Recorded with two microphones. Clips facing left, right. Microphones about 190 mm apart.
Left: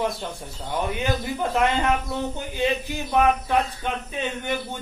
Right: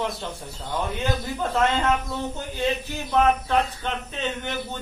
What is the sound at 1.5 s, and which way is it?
Speech, 15° left (ahead or behind).